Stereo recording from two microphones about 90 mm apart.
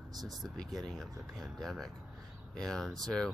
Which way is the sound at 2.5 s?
5° left (ahead or behind).